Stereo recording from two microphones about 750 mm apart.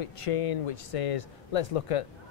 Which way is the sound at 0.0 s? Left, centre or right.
Left.